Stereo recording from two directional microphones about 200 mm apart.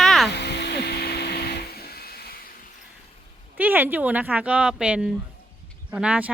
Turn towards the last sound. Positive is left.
turn(degrees=-5)  # may be behind; listen again after turning